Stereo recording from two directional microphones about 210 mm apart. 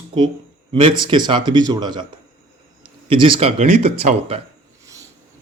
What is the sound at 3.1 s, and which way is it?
A man's voice, 25° right (ahead or behind).